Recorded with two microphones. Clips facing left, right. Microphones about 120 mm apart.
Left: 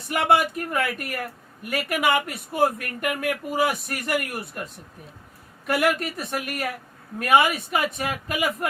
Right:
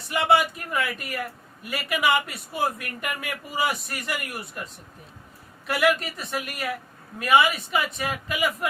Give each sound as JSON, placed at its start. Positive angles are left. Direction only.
{"t": 0.1, "sound": "a man's voice", "side_deg": 50}
{"t": 5.6, "sound": "a man's voice", "side_deg": 50}